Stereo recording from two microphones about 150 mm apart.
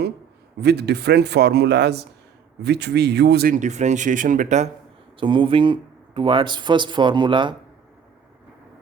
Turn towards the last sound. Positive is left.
turn(degrees=-30)  # may be behind; listen again after turning